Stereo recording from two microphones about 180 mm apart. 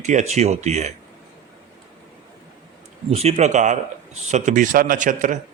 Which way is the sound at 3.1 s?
35° right (ahead or behind).